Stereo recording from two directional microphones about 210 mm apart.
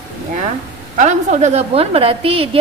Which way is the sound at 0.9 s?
35° right (ahead or behind).